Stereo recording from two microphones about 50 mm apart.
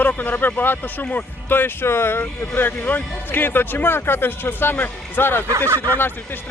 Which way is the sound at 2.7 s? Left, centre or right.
Left.